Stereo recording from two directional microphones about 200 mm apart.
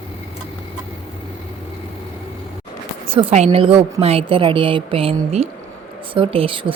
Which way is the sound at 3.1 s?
25° right (ahead or behind).